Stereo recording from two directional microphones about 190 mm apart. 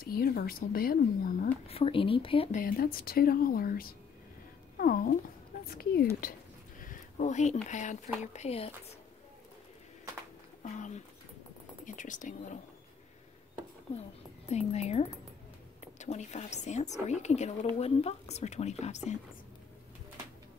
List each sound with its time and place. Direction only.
0.0 s speech: 50° left (ahead or behind)
1.7 s speech: 30° left (ahead or behind)
2.6 s speech: 50° left (ahead or behind)
6.8 s a sound: 40° left (ahead or behind)
7.6 s speech: 40° left (ahead or behind)
11.8 s speech: 40° left (ahead or behind)
14.5 s speech: 35° left (ahead or behind)